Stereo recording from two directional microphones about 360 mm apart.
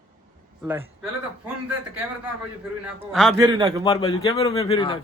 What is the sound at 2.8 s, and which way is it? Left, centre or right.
Speech, centre.